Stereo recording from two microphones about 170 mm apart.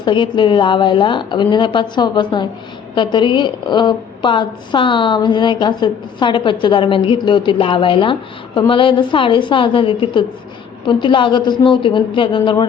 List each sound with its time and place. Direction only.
0.0 s a woman's voice: 30° left (ahead or behind)